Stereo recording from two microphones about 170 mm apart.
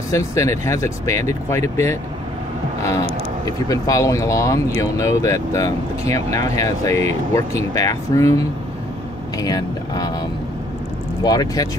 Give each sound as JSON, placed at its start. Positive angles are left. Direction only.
{"t": 0.1, "sound": "speech", "side_deg": 20}
{"t": 3.6, "sound": "speech", "side_deg": 20}
{"t": 11.2, "sound": "speech", "side_deg": 20}